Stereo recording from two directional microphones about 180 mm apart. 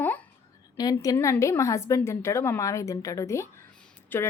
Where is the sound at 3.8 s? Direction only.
10° left (ahead or behind).